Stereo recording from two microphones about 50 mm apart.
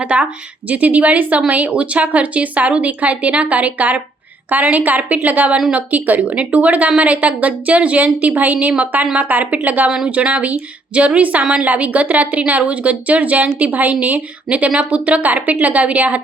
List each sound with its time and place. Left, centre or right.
0.0 s a woman's voice: right